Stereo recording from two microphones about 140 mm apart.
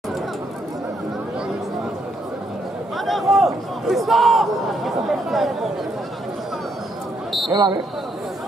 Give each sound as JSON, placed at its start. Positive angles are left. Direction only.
{"t": 3.1, "sound": "speech", "side_deg": 0}
{"t": 7.5, "sound": "speech", "side_deg": -30}